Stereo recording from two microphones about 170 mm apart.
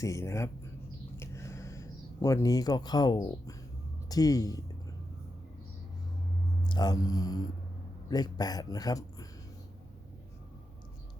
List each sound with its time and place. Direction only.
0.0 s speech: 15° left (ahead or behind)
1.1 s a sound: 15° left (ahead or behind)
4.1 s speech: 20° left (ahead or behind)
6.7 s speech: 25° left (ahead or behind)